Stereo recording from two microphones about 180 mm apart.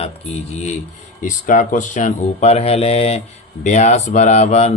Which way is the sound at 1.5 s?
45° left (ahead or behind).